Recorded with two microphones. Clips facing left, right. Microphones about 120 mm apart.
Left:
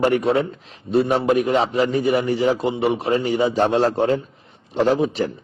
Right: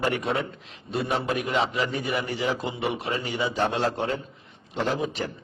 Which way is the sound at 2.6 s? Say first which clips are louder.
Left 8 dB; 30° left (ahead or behind).